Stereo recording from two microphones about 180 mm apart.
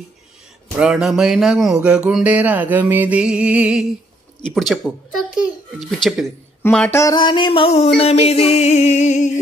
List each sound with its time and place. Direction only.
0.7 s a child's voice: 5° right (ahead or behind)
1.8 s music: 5° right (ahead or behind)
4.5 s a child's voice: centre (ahead or behind)
7.0 s a sound: 20° left (ahead or behind)
8.0 s music: 35° left (ahead or behind)